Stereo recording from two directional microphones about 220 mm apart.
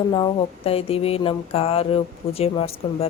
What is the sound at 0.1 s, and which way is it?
Speech, 25° left (ahead or behind).